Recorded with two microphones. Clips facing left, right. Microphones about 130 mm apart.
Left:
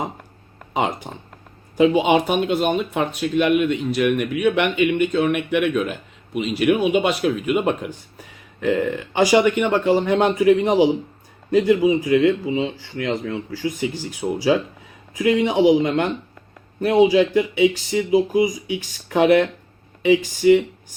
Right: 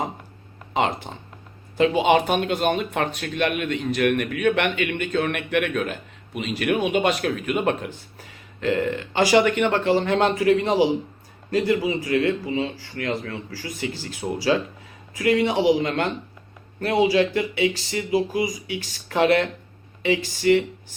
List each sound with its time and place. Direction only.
0.7 s a man's voice: 15° left (ahead or behind)